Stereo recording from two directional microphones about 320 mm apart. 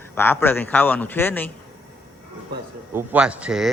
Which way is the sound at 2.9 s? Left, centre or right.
Centre.